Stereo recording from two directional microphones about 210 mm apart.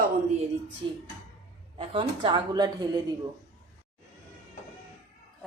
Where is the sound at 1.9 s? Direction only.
25° right (ahead or behind).